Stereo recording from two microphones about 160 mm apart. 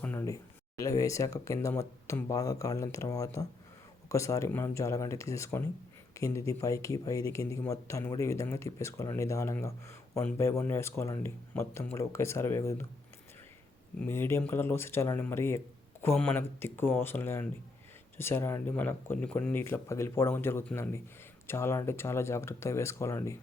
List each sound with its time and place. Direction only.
0.0 s a sound: 10° left (ahead or behind)
0.8 s speech: 20° left (ahead or behind)
14.1 s speech: 15° left (ahead or behind)